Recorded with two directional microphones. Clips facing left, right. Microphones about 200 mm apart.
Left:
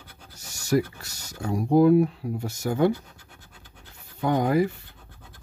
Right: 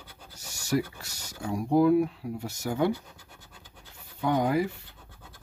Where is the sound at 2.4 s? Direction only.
45° left (ahead or behind).